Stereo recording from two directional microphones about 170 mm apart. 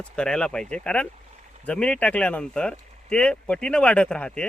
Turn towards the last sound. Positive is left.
turn(degrees=5)  # may be behind; listen again after turning